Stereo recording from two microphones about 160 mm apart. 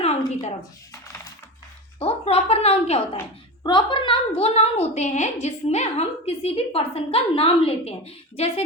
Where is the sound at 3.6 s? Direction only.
30° left (ahead or behind).